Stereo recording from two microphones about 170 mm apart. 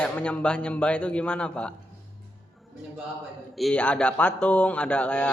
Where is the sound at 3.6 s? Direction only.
10° left (ahead or behind).